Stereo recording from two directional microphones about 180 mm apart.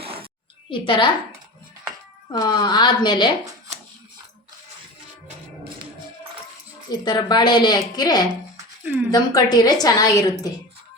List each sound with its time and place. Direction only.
0.7 s a woman's voice: 25° left (ahead or behind)
2.3 s a woman's voice: 20° left (ahead or behind)
7.0 s a woman's voice: 25° left (ahead or behind)
8.5 s music: 10° right (ahead or behind)
9.0 s a woman's voice: 20° left (ahead or behind)